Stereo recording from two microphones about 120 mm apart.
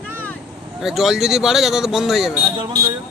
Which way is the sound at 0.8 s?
Centre (ahead or behind).